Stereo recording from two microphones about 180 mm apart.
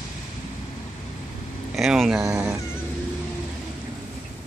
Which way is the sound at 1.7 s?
Centre (ahead or behind).